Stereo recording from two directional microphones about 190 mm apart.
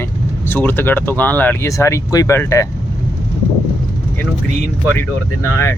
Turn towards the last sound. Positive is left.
turn(degrees=15)  # may be behind; listen again after turning